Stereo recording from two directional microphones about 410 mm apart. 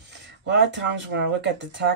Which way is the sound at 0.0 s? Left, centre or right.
Right.